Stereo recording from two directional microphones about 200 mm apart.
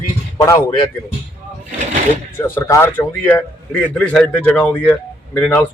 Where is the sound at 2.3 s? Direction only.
10° left (ahead or behind).